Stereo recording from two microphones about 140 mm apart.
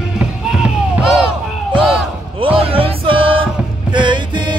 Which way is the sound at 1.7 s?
5° right (ahead or behind).